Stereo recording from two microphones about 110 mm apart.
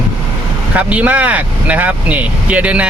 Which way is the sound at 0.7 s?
15° right (ahead or behind).